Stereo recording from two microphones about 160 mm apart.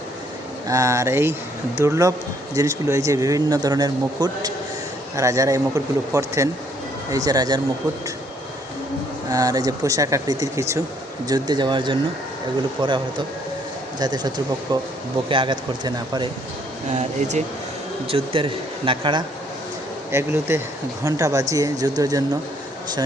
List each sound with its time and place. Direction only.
0.7 s speech: 20° right (ahead or behind)
9.3 s speech: 20° right (ahead or behind)
18.1 s speech: 35° right (ahead or behind)
20.1 s speech: 15° right (ahead or behind)